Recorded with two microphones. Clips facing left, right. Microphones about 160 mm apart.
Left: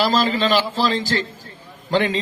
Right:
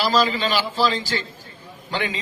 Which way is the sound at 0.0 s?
45° left (ahead or behind).